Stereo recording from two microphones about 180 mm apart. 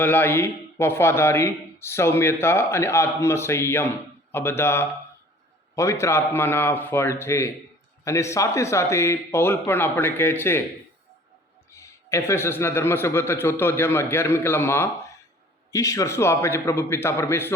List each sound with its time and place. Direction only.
0.0 s a man's voice: 10° left (ahead or behind)
11.7 s a man's voice: 15° left (ahead or behind)